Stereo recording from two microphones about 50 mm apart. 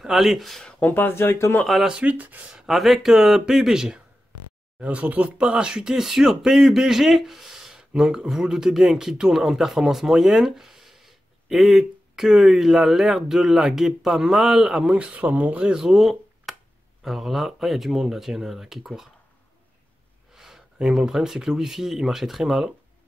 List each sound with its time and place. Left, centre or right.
0.0 s speech: centre
0.6 s speech: centre
0.8 s speech: left
2.0 s speech: right
2.7 s speech: centre
4.7 s speech: right
15.7 s speech: centre
20.3 s speech: centre